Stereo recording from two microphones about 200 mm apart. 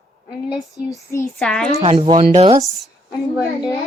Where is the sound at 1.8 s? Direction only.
30° right (ahead or behind).